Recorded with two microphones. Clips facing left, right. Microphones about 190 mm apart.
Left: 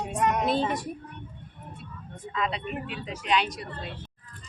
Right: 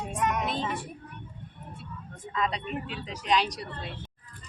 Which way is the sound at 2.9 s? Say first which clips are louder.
Even; 35° right (ahead or behind).